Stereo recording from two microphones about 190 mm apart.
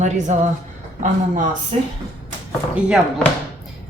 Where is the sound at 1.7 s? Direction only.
35° right (ahead or behind).